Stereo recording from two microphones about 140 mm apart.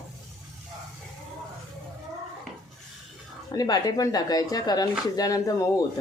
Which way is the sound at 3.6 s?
25° left (ahead or behind).